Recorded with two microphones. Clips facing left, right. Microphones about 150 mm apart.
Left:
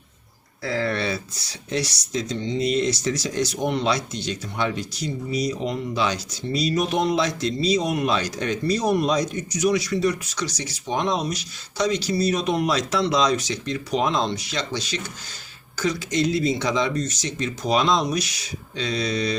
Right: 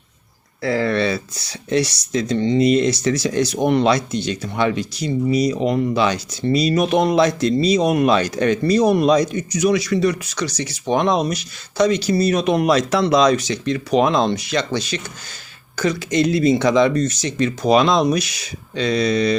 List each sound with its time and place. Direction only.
0.6 s speech: 85° right; by 19.4 s 60° right (ahead or behind)